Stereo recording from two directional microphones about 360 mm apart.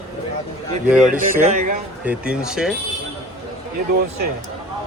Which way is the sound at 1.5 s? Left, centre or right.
Right.